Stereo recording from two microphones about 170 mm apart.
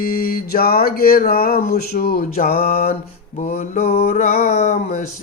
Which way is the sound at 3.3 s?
45° left (ahead or behind).